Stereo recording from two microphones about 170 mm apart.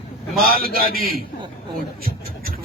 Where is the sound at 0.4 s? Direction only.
60° right (ahead or behind).